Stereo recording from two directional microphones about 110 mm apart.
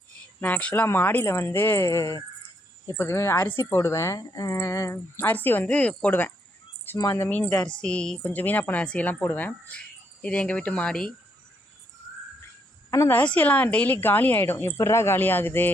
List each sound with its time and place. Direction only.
0.4 s a woman's voice: 15° left (ahead or behind)
7.0 s speech: 25° left (ahead or behind)
7.3 s a woman's voice: 10° left (ahead or behind)
13.1 s a woman's voice: 15° left (ahead or behind)